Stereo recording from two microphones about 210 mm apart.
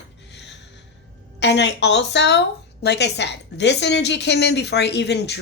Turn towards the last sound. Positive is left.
turn(degrees=55)  # may be behind; listen again after turning